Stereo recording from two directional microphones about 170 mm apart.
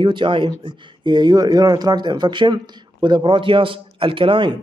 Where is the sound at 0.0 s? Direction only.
30° right (ahead or behind).